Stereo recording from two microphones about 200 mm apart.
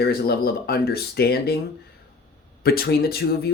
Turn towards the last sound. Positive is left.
turn(degrees=50)  # may be behind; listen again after turning